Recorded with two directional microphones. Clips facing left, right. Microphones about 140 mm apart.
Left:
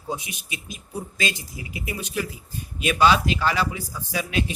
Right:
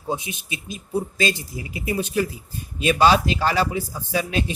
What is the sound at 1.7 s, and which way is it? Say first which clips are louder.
Speech: right 6 dB; 35° right (ahead or behind).